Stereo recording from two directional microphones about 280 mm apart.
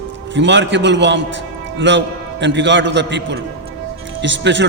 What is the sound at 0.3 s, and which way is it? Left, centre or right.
A man's voice, right.